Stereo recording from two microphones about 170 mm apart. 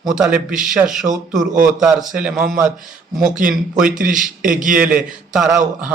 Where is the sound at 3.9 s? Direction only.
50° right (ahead or behind).